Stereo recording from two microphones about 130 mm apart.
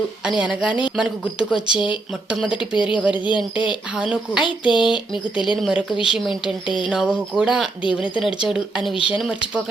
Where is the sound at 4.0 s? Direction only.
5° right (ahead or behind).